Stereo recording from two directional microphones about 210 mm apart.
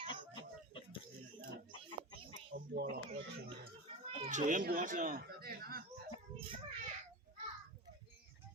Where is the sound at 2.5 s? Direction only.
40° right (ahead or behind).